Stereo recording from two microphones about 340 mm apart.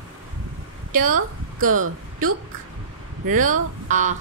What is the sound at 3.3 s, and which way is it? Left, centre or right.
Speech, right.